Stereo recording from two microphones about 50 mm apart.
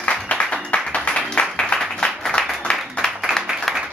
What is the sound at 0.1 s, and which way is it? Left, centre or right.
Clapping, left.